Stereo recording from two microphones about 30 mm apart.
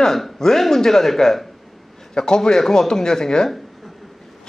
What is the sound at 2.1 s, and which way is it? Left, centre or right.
Speech, left.